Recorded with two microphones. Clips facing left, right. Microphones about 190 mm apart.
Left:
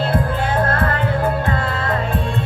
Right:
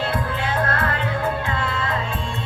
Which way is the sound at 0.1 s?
50° left (ahead or behind).